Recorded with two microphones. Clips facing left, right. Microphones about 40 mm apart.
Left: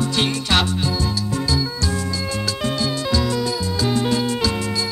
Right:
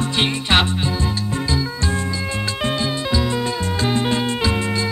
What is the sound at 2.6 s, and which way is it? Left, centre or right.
Music, centre.